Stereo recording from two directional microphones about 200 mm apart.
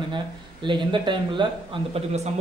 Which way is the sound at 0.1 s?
25° right (ahead or behind).